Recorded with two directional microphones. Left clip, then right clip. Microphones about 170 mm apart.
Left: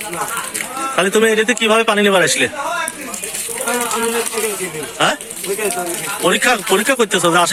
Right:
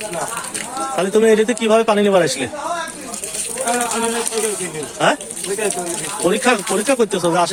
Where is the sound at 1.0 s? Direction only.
Centre (ahead or behind).